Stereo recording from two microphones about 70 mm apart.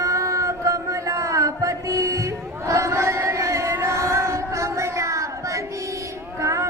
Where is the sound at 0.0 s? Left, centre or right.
Right.